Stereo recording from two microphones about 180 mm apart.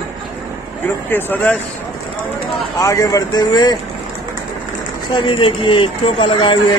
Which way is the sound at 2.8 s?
20° left (ahead or behind).